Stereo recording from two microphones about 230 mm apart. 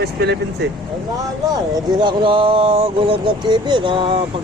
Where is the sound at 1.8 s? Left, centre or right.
Centre.